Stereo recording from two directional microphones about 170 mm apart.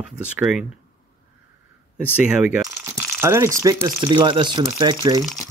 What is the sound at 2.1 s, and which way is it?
Speech, 5° right (ahead or behind).